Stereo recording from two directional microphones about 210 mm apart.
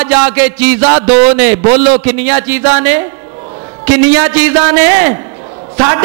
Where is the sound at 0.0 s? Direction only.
15° right (ahead or behind).